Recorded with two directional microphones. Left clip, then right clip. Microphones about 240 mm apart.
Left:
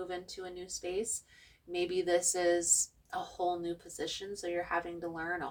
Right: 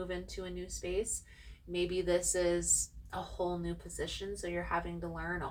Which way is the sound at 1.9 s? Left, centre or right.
Left.